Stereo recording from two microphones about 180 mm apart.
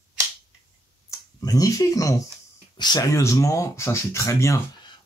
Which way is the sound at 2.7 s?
25° left (ahead or behind).